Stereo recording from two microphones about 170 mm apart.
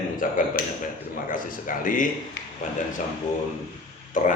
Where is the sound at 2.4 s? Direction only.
90° left.